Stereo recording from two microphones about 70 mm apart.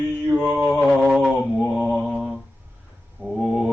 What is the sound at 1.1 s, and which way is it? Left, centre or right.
Mantra, centre.